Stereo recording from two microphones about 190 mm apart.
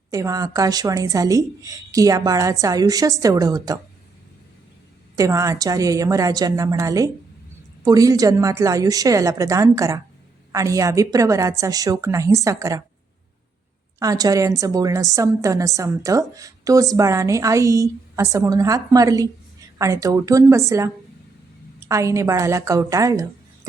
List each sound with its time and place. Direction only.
0.1 s a woman's voice: 20° right (ahead or behind)
5.1 s a woman's voice: 15° right (ahead or behind)
14.0 s a woman's voice: 20° right (ahead or behind)